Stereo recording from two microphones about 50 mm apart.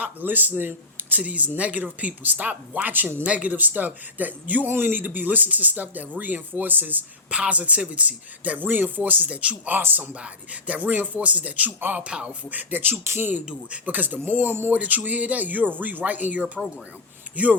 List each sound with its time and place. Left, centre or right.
0.0 s speech: right
1.2 s speech: right
3.2 s speech: right
7.3 s speech: right
9.7 s speech: right
10.2 s speech: right
13.1 s speech: right
13.4 s speech: right
14.7 s speech: right